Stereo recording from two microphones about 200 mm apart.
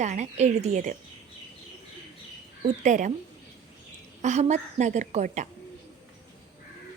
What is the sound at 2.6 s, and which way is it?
Speech, 40° right (ahead or behind).